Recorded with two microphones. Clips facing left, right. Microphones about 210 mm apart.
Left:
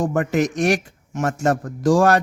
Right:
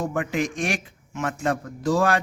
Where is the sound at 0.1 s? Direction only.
45° left (ahead or behind).